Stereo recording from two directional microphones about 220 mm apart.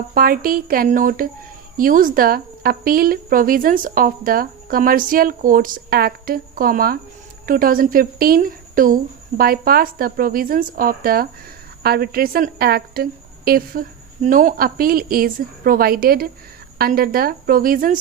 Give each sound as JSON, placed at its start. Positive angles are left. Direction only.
{"t": 0.1, "sound": "a woman's voice", "side_deg": -40}